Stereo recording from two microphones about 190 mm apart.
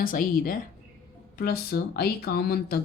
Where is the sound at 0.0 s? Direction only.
45° left (ahead or behind).